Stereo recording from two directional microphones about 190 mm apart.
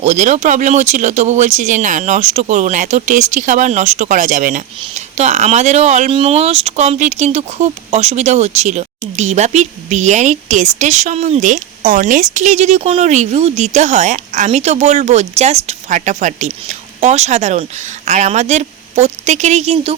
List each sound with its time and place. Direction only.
0.0 s speech: 35° right (ahead or behind)